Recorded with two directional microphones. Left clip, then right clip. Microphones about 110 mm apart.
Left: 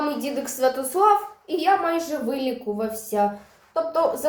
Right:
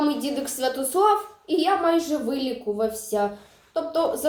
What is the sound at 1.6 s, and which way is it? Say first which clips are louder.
A woman's voice: left 1 dB; 20° right (ahead or behind).